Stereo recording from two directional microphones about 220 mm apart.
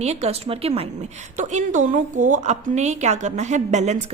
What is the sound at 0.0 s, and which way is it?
A woman's voice, 30° right (ahead or behind).